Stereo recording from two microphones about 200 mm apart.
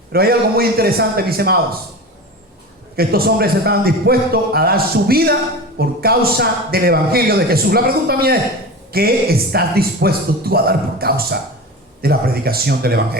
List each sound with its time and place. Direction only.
0.1 s a man's voice: 50° right (ahead or behind)
2.9 s a man's voice: 50° right (ahead or behind)